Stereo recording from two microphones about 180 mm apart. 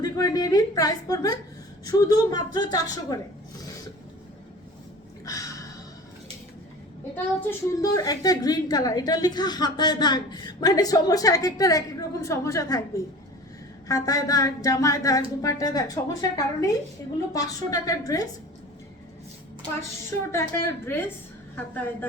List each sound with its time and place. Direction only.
0.0 s a woman's voice: 20° left (ahead or behind)
5.2 s a sound: 20° left (ahead or behind)
7.8 s a woman's voice: 20° left (ahead or behind)
13.8 s a woman's voice: 20° left (ahead or behind)
20.3 s a woman's voice: 15° left (ahead or behind)